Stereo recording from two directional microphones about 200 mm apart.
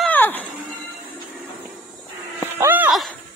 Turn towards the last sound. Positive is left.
turn(degrees=0)  # may be behind; listen again after turning